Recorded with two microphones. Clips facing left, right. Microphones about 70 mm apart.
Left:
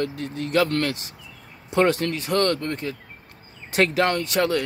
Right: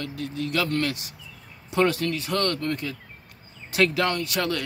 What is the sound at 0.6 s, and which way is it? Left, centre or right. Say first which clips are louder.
Speech: left 2 dB; left.